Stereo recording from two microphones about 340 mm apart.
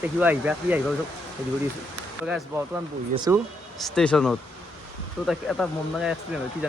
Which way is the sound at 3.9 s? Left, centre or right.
Centre.